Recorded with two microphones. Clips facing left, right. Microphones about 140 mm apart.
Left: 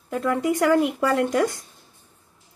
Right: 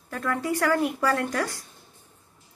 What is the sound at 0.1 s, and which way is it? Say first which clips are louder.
A woman's voice: left 5 dB; 20° left (ahead or behind).